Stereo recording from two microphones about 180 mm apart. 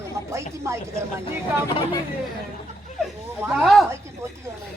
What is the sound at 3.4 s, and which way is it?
Speech, 10° right (ahead or behind).